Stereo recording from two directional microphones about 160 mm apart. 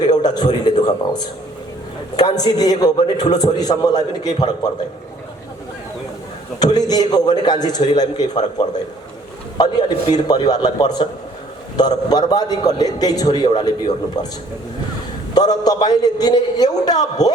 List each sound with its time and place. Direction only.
0.0 s a man's voice: 25° left (ahead or behind)
6.6 s a man's voice: 25° left (ahead or behind)
15.4 s a man's voice: 25° left (ahead or behind)